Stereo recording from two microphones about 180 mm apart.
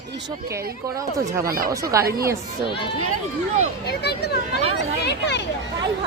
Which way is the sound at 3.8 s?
65° left (ahead or behind).